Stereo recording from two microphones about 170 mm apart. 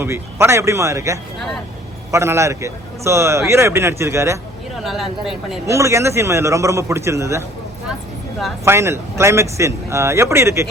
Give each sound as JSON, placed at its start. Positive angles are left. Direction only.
{"t": 0.0, "sound": "a man's voice", "side_deg": -15}
{"t": 4.8, "sound": "speech", "side_deg": 0}
{"t": 5.6, "sound": "a man's voice", "side_deg": -15}
{"t": 8.6, "sound": "a man's voice", "side_deg": -15}